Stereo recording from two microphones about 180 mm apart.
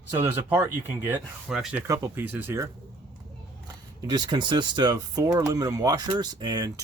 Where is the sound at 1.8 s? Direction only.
15° right (ahead or behind).